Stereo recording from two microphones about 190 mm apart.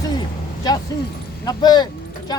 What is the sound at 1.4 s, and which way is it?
Speech, 20° left (ahead or behind).